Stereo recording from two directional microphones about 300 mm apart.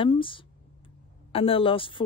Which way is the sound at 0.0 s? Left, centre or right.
Centre.